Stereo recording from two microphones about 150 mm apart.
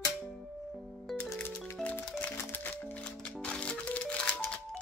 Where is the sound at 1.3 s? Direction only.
10° left (ahead or behind).